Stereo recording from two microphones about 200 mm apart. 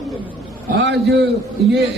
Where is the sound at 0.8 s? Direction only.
60° right (ahead or behind).